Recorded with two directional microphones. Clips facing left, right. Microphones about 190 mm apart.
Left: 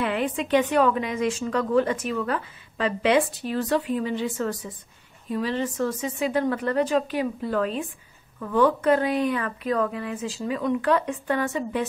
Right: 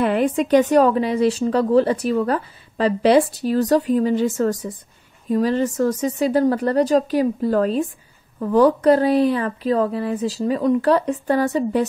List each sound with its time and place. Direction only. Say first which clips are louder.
0.0 s a woman's voice: right 7 dB; 45° right (ahead or behind)